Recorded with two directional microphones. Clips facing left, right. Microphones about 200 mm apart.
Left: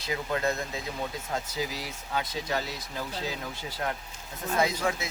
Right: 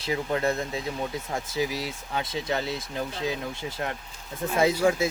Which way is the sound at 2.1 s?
25° right (ahead or behind).